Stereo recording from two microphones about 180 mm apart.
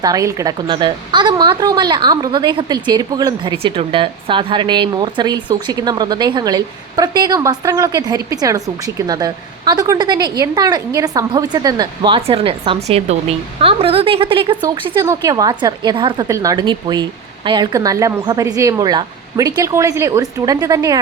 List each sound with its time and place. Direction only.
0.0 s a woman's voice: 20° right (ahead or behind)